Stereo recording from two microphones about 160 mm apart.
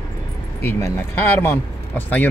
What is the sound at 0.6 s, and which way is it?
Speech, 15° left (ahead or behind).